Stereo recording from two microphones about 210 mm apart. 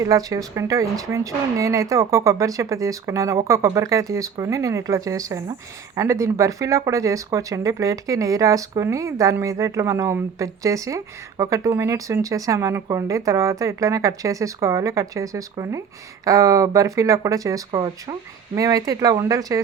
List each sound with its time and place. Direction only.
0.0 s speech: 15° right (ahead or behind)